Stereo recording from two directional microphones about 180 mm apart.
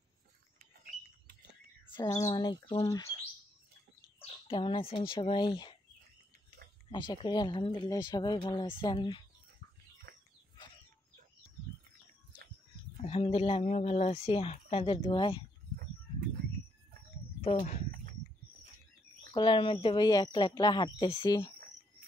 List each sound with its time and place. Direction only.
0.6 s a sound: 55° right (ahead or behind)
2.0 s speech: 20° left (ahead or behind)
4.2 s speech: 30° left (ahead or behind)
6.9 s speech: 25° left (ahead or behind)
10.1 s a sound: 65° right (ahead or behind)
13.0 s speech: 35° left (ahead or behind)
17.6 s speech: 45° left (ahead or behind)
19.3 s speech: 25° left (ahead or behind)